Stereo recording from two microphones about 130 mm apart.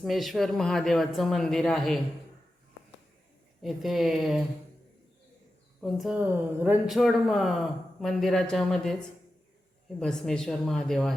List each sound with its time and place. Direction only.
0.0 s a man's voice: centre (ahead or behind)
3.6 s a man's voice: centre (ahead or behind)
5.8 s a man's voice: centre (ahead or behind)
6.3 s speech: 15° right (ahead or behind)
6.8 s a man's voice: centre (ahead or behind)
10.0 s a man's voice: 5° left (ahead or behind)